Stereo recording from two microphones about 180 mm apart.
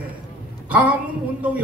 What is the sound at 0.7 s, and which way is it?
Speech, 10° right (ahead or behind).